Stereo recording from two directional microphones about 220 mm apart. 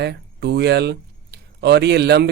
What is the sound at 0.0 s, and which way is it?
Speech, 50° right (ahead or behind).